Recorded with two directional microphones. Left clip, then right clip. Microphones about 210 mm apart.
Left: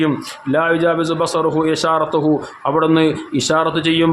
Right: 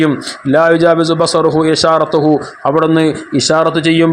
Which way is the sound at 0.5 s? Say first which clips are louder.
Right 6 dB; 20° right (ahead or behind).